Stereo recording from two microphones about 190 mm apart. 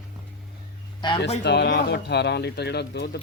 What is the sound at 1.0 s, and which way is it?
Speech, 25° left (ahead or behind).